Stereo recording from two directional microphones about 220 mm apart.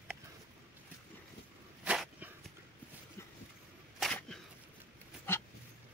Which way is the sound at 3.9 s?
Centre (ahead or behind).